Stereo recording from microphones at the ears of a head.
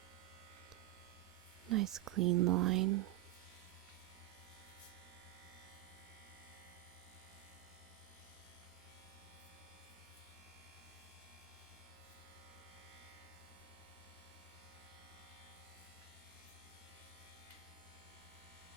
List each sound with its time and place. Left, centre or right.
1.6 s speech: right